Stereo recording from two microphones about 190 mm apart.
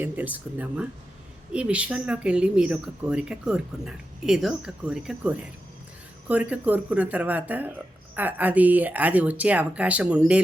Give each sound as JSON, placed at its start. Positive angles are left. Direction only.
{"t": 0.0, "sound": "speech", "side_deg": -10}